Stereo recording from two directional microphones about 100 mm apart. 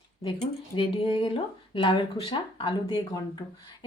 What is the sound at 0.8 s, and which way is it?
A woman's voice, 60° left (ahead or behind).